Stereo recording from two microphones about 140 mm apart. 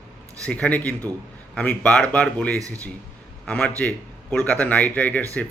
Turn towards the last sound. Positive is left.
turn(degrees=10)  # may be behind; listen again after turning